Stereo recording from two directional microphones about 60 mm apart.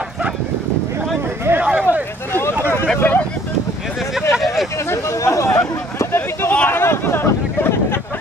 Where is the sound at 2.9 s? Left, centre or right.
Left.